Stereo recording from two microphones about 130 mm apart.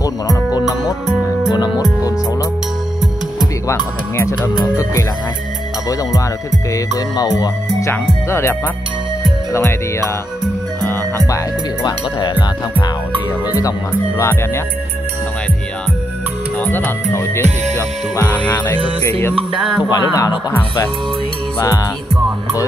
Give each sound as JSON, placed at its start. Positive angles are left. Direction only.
{"t": 0.6, "sound": "music", "side_deg": 25}
{"t": 4.2, "sound": "speech", "side_deg": 25}
{"t": 6.7, "sound": "speech", "side_deg": 30}
{"t": 7.9, "sound": "speech", "side_deg": 20}
{"t": 10.8, "sound": "music", "side_deg": 15}
{"t": 13.6, "sound": "speech", "side_deg": 25}
{"t": 16.5, "sound": "music", "side_deg": 15}
{"t": 19.8, "sound": "speech", "side_deg": 35}
{"t": 21.5, "sound": "speech", "side_deg": 25}